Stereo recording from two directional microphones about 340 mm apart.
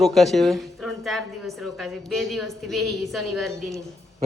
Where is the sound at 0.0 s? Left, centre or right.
Centre.